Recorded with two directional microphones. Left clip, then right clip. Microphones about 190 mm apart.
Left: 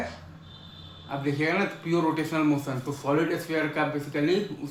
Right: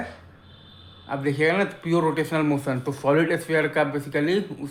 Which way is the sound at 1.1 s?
25° right (ahead or behind).